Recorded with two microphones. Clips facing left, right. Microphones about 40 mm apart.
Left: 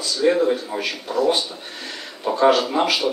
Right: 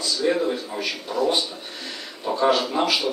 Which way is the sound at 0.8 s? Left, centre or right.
Left.